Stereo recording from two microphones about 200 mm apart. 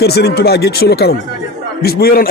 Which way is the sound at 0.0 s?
55° left (ahead or behind).